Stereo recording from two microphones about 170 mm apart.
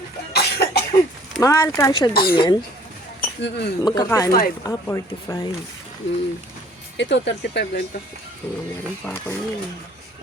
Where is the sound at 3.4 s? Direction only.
80° left.